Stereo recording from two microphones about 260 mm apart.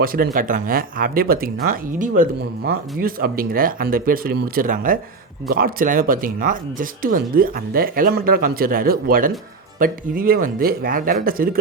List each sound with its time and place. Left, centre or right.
0.0 s speech: right